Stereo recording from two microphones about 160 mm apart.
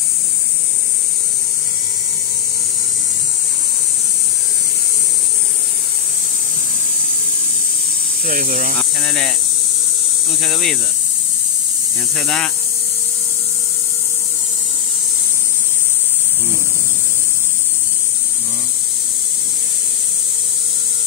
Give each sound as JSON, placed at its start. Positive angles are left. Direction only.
{"t": 8.3, "sound": "speech", "side_deg": -60}
{"t": 8.7, "sound": "speech", "side_deg": 5}
{"t": 10.4, "sound": "speech", "side_deg": 5}
{"t": 12.2, "sound": "speech", "side_deg": 5}